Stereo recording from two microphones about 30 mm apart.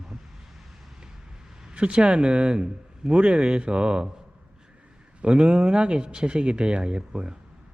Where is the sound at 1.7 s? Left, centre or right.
Right.